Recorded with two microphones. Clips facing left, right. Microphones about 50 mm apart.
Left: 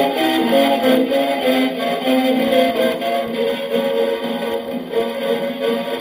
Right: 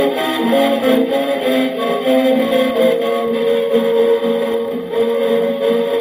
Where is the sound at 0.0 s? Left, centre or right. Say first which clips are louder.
Even; right.